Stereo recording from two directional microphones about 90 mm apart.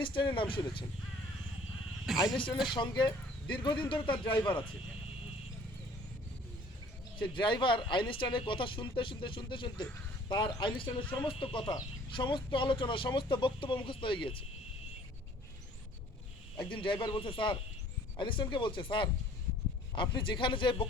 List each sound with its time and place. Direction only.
0.0 s speech: 65° left (ahead or behind)
2.0 s speech: centre (ahead or behind)
2.7 s speech: 60° left (ahead or behind)
7.2 s speech: 65° left (ahead or behind)
11.3 s speech: 80° left
12.1 s speech: 60° left (ahead or behind)
16.6 s speech: 65° left (ahead or behind)